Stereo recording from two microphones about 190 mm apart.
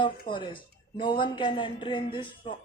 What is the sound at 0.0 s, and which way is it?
Speech, 25° left (ahead or behind).